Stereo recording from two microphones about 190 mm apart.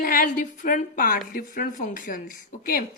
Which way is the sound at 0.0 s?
45° left (ahead or behind).